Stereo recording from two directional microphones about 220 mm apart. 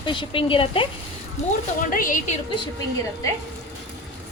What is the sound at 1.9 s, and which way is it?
Speech, 35° left (ahead or behind).